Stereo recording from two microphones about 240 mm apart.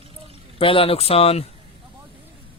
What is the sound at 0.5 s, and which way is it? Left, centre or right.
Speech, left.